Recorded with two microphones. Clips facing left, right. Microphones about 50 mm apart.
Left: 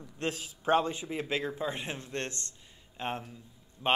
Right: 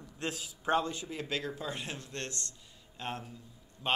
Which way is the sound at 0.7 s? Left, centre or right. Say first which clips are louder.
Left 4 dB; left.